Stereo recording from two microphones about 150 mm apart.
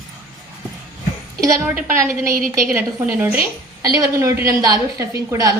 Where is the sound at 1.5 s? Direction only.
20° right (ahead or behind).